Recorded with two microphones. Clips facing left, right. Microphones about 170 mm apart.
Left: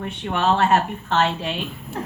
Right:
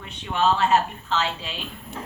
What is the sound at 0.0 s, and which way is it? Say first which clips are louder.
A woman's voice: left 1 dB; 55° left (ahead or behind).